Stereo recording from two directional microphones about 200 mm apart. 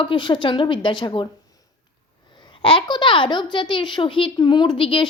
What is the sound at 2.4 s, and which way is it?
A child's voice, 25° left (ahead or behind).